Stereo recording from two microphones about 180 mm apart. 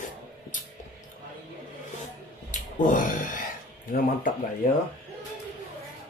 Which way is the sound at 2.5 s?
45° left (ahead or behind).